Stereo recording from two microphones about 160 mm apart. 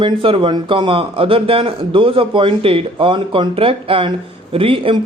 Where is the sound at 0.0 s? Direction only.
30° right (ahead or behind).